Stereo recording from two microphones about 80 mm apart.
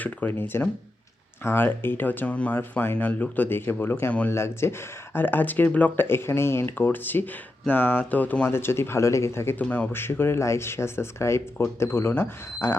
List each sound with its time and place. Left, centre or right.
0.0 s speech: left
8.4 s speech: left
9.6 s speech: centre
9.9 s speech: left